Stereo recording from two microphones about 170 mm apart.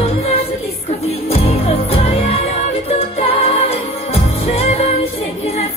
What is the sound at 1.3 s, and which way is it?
Music, 35° left (ahead or behind).